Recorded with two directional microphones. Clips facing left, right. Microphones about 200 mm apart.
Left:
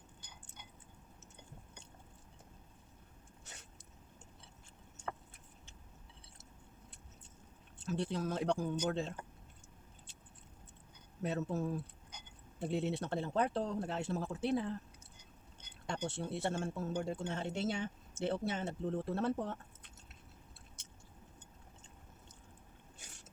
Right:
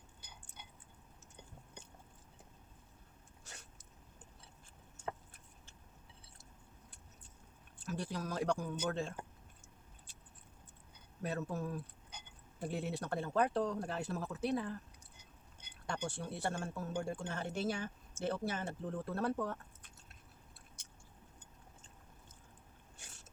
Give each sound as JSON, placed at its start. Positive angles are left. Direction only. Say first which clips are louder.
{"t": 7.8, "sound": "speech", "louder": "left 4 dB", "side_deg": 25}
{"t": 11.2, "sound": "speech", "louder": "left 3 dB", "side_deg": 25}
{"t": 15.9, "sound": "speech", "louder": "left 2 dB", "side_deg": 25}